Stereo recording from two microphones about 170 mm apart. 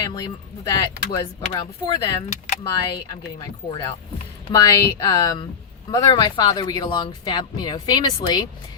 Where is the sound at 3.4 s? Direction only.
25° left (ahead or behind).